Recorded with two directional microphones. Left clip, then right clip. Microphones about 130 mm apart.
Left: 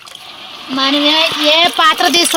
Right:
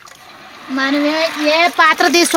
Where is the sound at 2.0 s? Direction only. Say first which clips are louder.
Left 1 dB; 55° right (ahead or behind).